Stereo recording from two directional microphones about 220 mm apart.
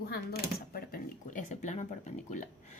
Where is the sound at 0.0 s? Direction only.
45° left (ahead or behind).